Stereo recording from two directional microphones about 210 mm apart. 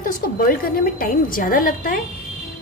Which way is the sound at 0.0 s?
40° left (ahead or behind).